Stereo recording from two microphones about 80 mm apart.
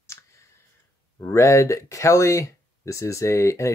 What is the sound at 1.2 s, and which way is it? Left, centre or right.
Speech, left.